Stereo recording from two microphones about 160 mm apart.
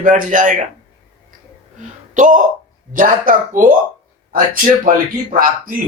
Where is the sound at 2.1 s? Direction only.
50° right (ahead or behind).